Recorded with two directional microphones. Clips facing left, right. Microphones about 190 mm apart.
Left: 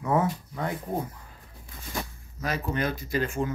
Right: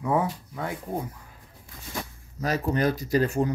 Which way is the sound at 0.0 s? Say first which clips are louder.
Even; 15° right (ahead or behind).